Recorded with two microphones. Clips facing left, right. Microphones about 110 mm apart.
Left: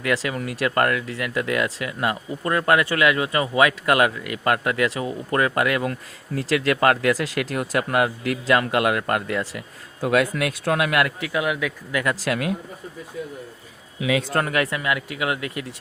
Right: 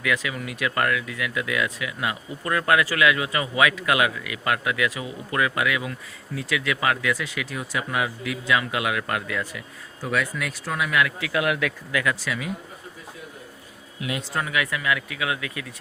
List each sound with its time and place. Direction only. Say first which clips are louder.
0.1 s speech: left 4 dB; 40° left (ahead or behind)
10.0 s speech: left 6 dB; 65° left (ahead or behind)
11.3 s a man's voice: even; 10° left (ahead or behind)
11.9 s speech: left 2 dB; 30° left (ahead or behind)
12.3 s speech: left 6 dB; 70° left (ahead or behind)
14.3 s speech: left 4 dB; 50° left (ahead or behind)
14.7 s speech: left 1 dB; 30° left (ahead or behind)